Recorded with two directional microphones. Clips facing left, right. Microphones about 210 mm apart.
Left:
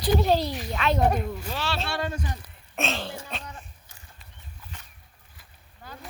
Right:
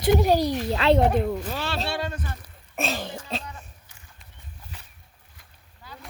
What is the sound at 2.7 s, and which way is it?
Speech, centre (ahead or behind).